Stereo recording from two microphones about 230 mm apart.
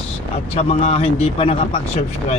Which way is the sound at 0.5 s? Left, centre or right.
Left.